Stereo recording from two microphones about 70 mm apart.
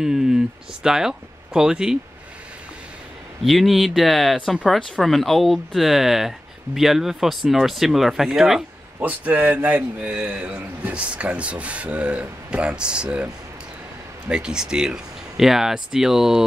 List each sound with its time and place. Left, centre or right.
0.0 s speech: centre
3.4 s speech: centre
9.0 s speech: right
14.3 s speech: centre